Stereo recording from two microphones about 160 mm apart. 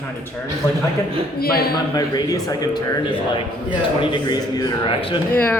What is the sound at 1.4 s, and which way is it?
Speech, 70° left (ahead or behind).